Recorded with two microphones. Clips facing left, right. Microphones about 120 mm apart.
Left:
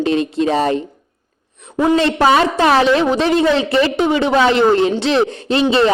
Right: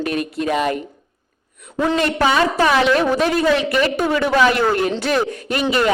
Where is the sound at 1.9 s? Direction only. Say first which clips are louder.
Left 3 dB; 30° left (ahead or behind).